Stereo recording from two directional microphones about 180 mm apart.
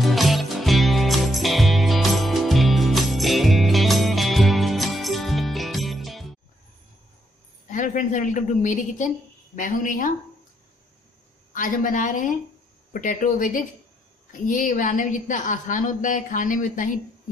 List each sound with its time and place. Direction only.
0.0 s music: centre (ahead or behind)
7.6 s a woman's voice: 45° left (ahead or behind)
11.5 s a woman's voice: 50° left (ahead or behind)